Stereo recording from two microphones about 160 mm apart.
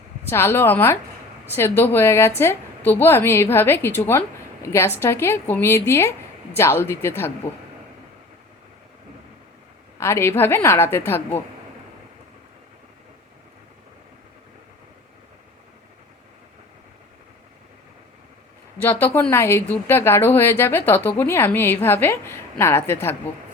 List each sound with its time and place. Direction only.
0.3 s speech: 15° left (ahead or behind)
10.0 s speech: 15° left (ahead or behind)
18.8 s speech: 10° left (ahead or behind)